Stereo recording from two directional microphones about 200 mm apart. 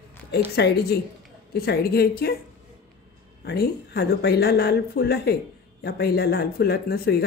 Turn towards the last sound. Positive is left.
turn(degrees=50)  # may be behind; listen again after turning